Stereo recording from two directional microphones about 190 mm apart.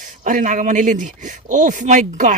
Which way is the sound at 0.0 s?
45° right (ahead or behind).